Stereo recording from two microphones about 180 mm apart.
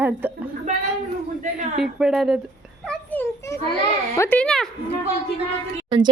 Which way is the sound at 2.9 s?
5° left (ahead or behind).